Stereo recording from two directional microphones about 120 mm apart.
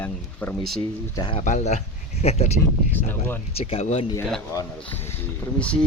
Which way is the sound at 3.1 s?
15° left (ahead or behind).